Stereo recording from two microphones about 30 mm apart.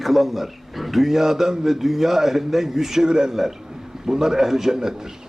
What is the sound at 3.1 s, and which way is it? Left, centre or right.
A man's voice, right.